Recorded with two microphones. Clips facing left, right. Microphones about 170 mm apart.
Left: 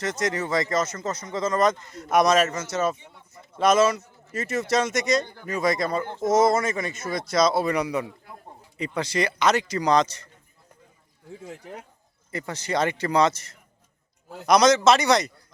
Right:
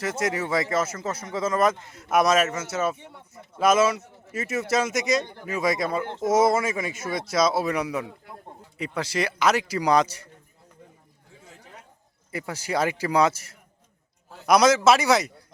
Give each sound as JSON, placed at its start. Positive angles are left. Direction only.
{"t": 0.0, "sound": "speech", "side_deg": -5}
{"t": 3.0, "sound": "a sound", "side_deg": -60}
{"t": 3.5, "sound": "speech", "side_deg": -5}
{"t": 12.3, "sound": "a man's voice", "side_deg": -10}